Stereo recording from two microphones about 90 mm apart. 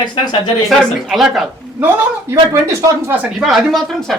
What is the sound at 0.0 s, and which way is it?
Speech, 55° left (ahead or behind).